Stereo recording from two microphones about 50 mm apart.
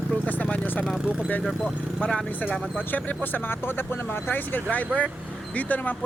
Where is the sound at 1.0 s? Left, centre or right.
Centre.